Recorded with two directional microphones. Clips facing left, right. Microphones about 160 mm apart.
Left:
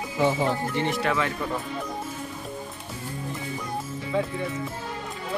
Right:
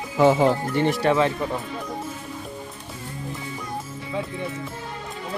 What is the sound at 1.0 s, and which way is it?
Speech, 20° right (ahead or behind).